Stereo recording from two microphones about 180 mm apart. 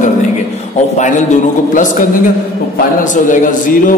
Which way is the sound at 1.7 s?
45° left (ahead or behind).